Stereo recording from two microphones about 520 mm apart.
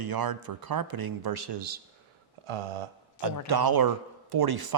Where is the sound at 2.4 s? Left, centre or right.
Right.